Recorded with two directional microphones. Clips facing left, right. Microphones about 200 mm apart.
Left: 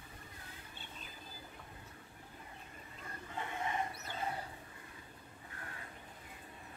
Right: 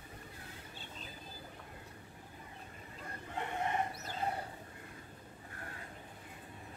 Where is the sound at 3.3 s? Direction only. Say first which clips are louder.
Right 3 dB; 60° right (ahead or behind).